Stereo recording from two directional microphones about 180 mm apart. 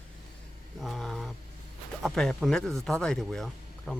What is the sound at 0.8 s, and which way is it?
Speech, centre (ahead or behind).